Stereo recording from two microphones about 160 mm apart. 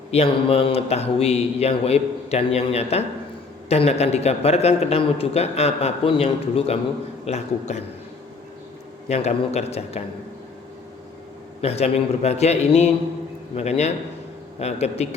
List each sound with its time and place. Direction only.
0.1 s a man's voice: 35° left (ahead or behind)
9.0 s a man's voice: 40° left (ahead or behind)
11.6 s a man's voice: 40° left (ahead or behind)